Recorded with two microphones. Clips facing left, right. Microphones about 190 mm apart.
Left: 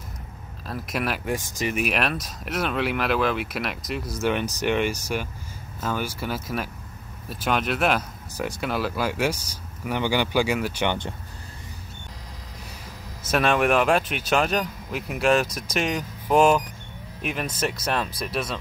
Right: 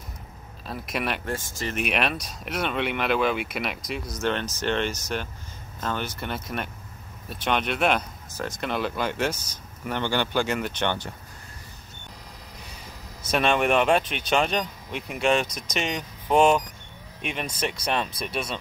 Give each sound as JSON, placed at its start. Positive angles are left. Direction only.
{"t": 0.7, "sound": "speech", "side_deg": 0}
{"t": 1.2, "sound": "speech", "side_deg": 15}
{"t": 1.8, "sound": "speech", "side_deg": 0}
{"t": 4.2, "sound": "speech", "side_deg": 10}
{"t": 13.3, "sound": "speech", "side_deg": 5}